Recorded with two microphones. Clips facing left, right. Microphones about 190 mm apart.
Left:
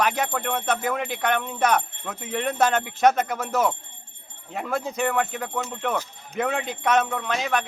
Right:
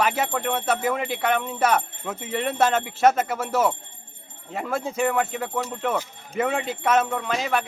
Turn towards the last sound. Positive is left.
turn(degrees=-5)  # may be behind; listen again after turning